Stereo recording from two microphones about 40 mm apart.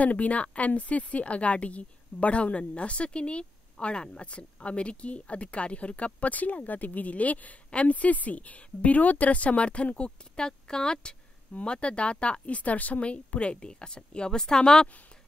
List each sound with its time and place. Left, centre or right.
0.0 s a woman's voice: left; by 14.9 s centre